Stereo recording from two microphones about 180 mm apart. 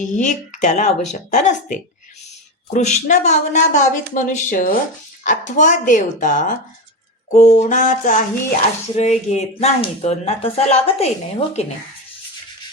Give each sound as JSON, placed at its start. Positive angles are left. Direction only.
{"t": 0.0, "sound": "speech", "side_deg": 45}